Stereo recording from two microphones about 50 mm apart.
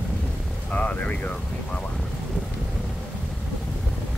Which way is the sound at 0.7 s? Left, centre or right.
Left.